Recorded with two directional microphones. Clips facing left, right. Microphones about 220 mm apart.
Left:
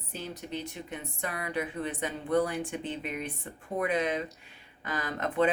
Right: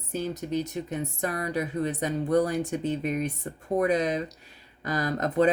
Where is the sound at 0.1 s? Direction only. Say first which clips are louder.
Right 8 dB; 45° right (ahead or behind).